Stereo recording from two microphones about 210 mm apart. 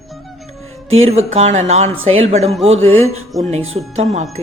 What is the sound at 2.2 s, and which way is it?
Speech, 30° right (ahead or behind).